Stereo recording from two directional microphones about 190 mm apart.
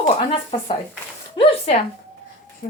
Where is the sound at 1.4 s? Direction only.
30° left (ahead or behind).